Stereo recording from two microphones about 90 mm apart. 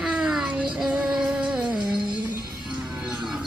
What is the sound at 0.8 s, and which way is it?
Music, 5° right (ahead or behind).